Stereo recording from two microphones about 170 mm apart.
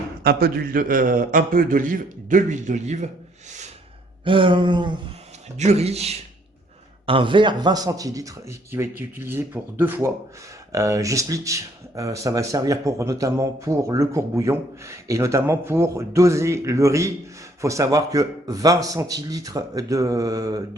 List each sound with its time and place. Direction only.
0.2 s a man's voice: 65° right (ahead or behind); by 3.1 s 40° right (ahead or behind)
4.2 s speech: 30° right (ahead or behind)
5.5 s speech: 40° right (ahead or behind); by 20.6 s 20° right (ahead or behind)